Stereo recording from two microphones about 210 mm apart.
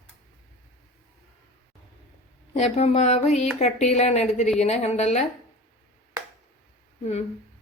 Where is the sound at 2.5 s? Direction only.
30° left (ahead or behind).